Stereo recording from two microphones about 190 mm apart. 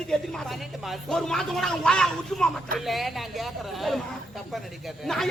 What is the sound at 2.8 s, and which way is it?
Speech, centre (ahead or behind).